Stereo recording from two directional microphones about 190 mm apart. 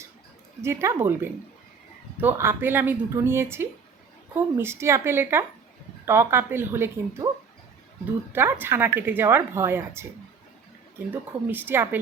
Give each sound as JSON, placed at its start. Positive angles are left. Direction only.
{"t": 0.6, "sound": "a woman's voice", "side_deg": -15}
{"t": 8.3, "sound": "a woman's voice", "side_deg": -10}
{"t": 11.1, "sound": "a woman's voice", "side_deg": -10}